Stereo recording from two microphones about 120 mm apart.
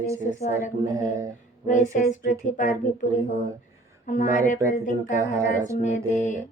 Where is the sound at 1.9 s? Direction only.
90° left.